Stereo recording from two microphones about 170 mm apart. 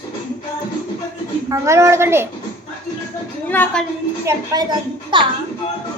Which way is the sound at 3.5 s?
10° left (ahead or behind).